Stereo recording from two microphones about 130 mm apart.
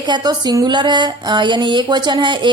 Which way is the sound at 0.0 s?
35° right (ahead or behind).